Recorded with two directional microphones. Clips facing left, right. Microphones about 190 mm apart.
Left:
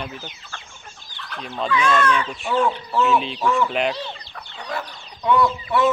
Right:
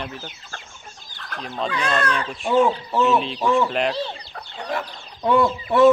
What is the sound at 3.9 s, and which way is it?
Chicken, 35° right (ahead or behind).